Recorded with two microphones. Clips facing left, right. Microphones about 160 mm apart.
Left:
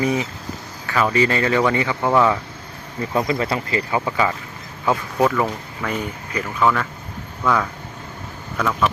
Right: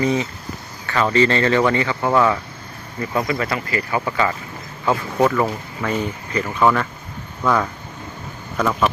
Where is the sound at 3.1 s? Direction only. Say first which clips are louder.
Left 1 dB; 25° left (ahead or behind).